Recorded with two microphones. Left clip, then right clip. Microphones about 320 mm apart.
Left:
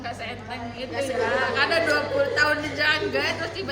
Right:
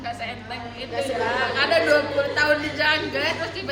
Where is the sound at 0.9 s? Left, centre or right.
Centre.